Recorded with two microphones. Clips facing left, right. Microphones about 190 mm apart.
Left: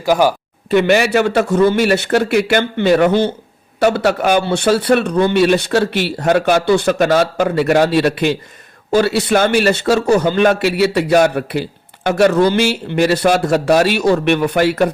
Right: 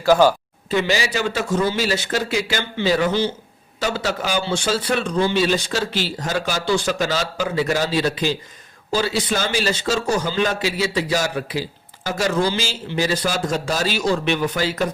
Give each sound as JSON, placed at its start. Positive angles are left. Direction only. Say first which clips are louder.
{"t": 0.0, "sound": "speech", "louder": "left 1 dB", "side_deg": 15}
{"t": 0.7, "sound": "a man's voice", "louder": "left 8 dB", "side_deg": 60}